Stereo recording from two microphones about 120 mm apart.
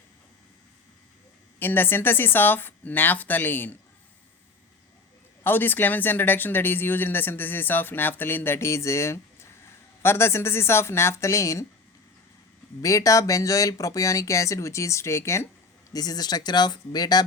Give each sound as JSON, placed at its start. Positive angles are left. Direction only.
{"t": 1.5, "sound": "speech", "side_deg": 15}
{"t": 5.4, "sound": "speech", "side_deg": 15}
{"t": 12.8, "sound": "speech", "side_deg": 30}